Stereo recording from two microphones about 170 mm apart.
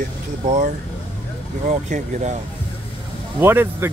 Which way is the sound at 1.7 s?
45° right (ahead or behind).